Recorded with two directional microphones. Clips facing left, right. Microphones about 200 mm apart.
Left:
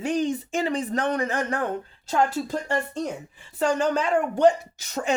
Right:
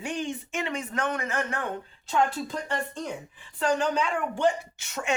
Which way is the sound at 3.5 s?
40° left (ahead or behind).